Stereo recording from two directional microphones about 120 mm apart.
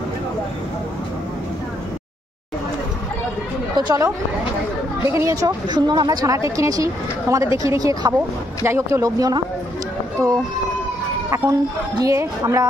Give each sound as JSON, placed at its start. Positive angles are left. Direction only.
{"t": 3.7, "sound": "speech", "side_deg": -30}
{"t": 5.1, "sound": "speech", "side_deg": -25}
{"t": 11.2, "sound": "speech", "side_deg": -25}